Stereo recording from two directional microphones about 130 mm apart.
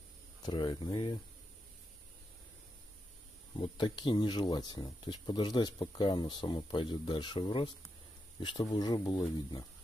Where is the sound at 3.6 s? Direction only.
40° left (ahead or behind).